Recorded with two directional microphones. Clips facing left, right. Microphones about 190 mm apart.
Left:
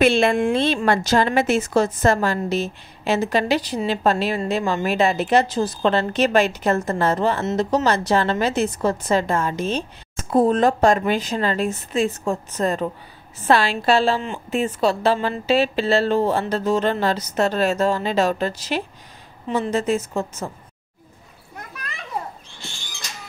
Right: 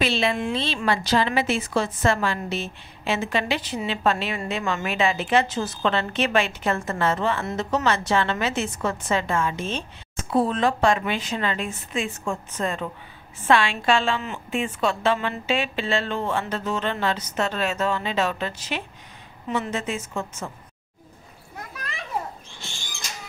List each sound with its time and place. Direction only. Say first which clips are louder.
0.0 s a woman's voice: left 7 dB; 50° left (ahead or behind); by 20.5 s 35° left (ahead or behind)